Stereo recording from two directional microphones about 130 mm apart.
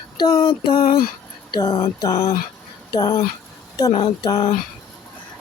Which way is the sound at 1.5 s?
30° left (ahead or behind).